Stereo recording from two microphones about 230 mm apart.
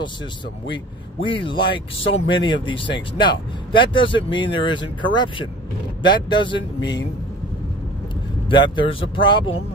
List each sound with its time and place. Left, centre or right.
1.2 s speech: left
8.5 s speech: left